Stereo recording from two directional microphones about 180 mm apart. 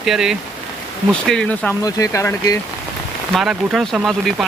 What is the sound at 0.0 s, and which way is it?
Speech, centre (ahead or behind).